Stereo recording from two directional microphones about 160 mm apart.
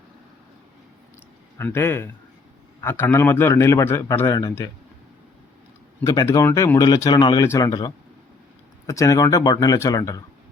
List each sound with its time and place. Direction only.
1.5 s a man's voice: 15° left (ahead or behind)
6.0 s speech: 15° left (ahead or behind)